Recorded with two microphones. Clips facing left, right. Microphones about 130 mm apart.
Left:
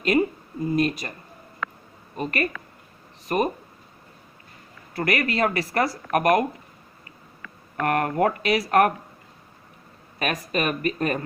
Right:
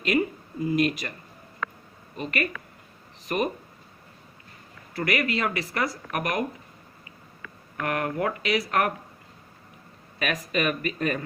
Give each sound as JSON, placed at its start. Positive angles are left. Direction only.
{"t": 0.0, "sound": "a sound", "side_deg": 40}
{"t": 0.8, "sound": "speech", "side_deg": 35}
{"t": 2.1, "sound": "speech", "side_deg": 40}
{"t": 4.9, "sound": "speech", "side_deg": 40}
{"t": 7.8, "sound": "speech", "side_deg": 45}
{"t": 10.2, "sound": "speech", "side_deg": 40}